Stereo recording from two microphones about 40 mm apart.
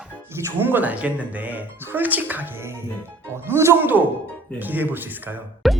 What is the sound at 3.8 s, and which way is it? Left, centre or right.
Speech, right.